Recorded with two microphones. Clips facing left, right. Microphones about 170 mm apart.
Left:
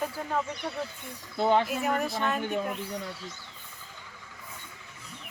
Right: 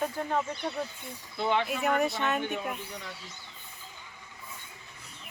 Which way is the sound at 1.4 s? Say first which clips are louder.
Left 4 dB; 40° left (ahead or behind).